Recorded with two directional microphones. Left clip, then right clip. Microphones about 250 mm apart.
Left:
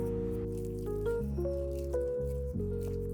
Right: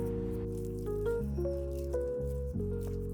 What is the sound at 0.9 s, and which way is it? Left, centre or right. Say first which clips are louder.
Music: even; centre.